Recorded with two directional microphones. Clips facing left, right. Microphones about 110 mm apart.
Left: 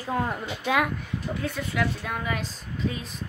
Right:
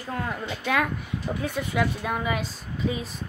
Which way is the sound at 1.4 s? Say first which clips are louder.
Right 2 dB; 15° right (ahead or behind).